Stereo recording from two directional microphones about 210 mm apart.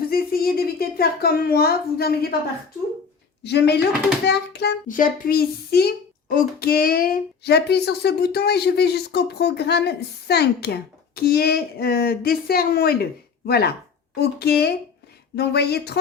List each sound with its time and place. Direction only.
0.1 s a woman's voice: 45° left (ahead or behind)
3.4 s speech: 50° left (ahead or behind)